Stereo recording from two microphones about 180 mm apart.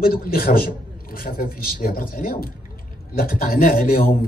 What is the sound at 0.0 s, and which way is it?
Speech, 55° left (ahead or behind).